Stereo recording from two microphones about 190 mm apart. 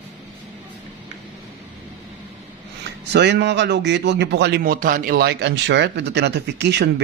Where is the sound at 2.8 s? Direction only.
65° right (ahead or behind).